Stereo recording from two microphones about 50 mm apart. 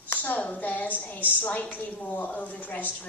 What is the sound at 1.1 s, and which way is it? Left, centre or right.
A woman's voice, left.